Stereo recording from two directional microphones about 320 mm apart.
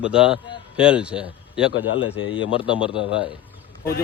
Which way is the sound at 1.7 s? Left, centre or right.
Left.